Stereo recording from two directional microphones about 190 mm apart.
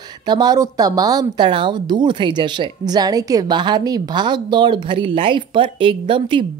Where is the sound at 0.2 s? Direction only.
20° right (ahead or behind).